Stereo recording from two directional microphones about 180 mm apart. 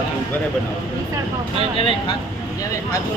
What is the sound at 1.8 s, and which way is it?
Speech, 30° left (ahead or behind).